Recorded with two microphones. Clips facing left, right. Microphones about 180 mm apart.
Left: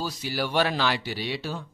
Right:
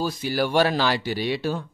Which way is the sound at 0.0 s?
50° right (ahead or behind).